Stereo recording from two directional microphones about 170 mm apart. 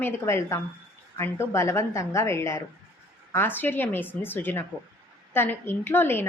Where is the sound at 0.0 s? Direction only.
15° left (ahead or behind).